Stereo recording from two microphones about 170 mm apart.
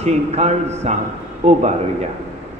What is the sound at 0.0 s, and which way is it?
A man's voice, 40° right (ahead or behind).